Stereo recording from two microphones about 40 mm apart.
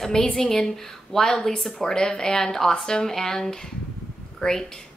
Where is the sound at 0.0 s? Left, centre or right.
Centre.